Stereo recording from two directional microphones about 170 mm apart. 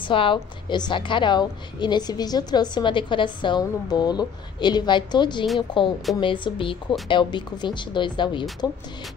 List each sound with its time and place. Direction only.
0.0 s a woman's voice: 30° left (ahead or behind)